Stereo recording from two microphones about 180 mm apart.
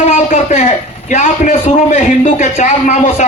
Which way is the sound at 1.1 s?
45° left (ahead or behind).